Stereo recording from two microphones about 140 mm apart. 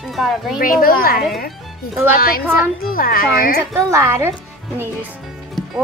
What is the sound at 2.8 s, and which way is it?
Speech, 90° left.